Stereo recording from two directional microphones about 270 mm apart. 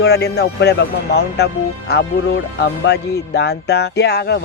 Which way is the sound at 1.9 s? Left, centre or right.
Left.